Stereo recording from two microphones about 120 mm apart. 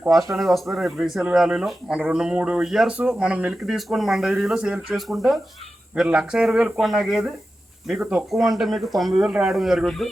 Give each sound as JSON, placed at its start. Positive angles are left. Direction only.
{"t": 0.3, "sound": "speech", "side_deg": 0}